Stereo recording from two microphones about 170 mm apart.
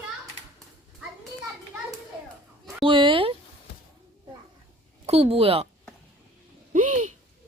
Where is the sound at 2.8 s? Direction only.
30° right (ahead or behind).